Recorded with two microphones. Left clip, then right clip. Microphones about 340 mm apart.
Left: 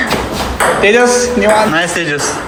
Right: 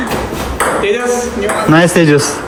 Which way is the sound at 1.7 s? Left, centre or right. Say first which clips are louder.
Right 5 dB; centre.